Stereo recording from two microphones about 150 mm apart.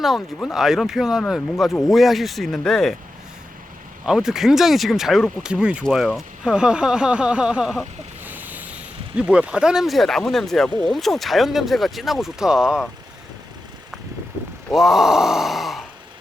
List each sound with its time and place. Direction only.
0.4 s speech: 5° right (ahead or behind)
4.0 s speech: 5° right (ahead or behind)
14.7 s speech: centre (ahead or behind)